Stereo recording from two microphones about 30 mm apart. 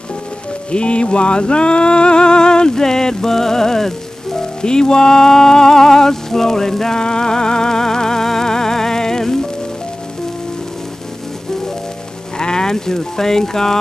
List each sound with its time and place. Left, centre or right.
0.7 s music: left; by 3.9 s centre
4.4 s music: left
12.4 s speech: left